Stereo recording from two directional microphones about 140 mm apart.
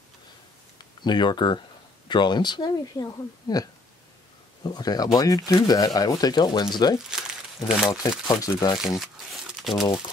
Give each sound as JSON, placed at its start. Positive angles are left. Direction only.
{"t": 1.0, "sound": "speech", "side_deg": 30}
{"t": 4.6, "sound": "speech", "side_deg": 30}
{"t": 7.1, "sound": "a sound", "side_deg": -5}
{"t": 8.3, "sound": "speech", "side_deg": 25}
{"t": 9.0, "sound": "crumpling", "side_deg": 0}